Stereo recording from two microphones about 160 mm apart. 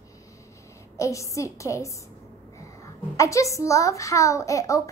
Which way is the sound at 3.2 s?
20° left (ahead or behind).